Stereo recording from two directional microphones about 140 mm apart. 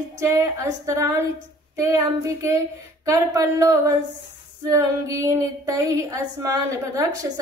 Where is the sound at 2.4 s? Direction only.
20° right (ahead or behind).